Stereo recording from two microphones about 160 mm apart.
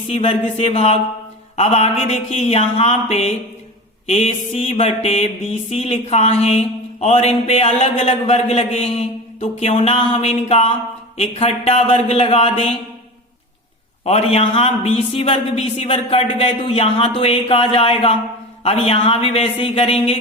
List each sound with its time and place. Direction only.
0.1 s a woman's voice: 40° left (ahead or behind)
1.5 s a sound: 40° left (ahead or behind)
4.0 s a woman's voice: 40° left (ahead or behind)
14.0 s a woman's voice: 40° left (ahead or behind)